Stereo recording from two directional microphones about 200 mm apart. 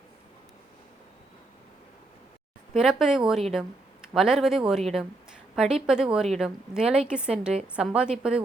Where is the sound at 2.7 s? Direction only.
5° right (ahead or behind).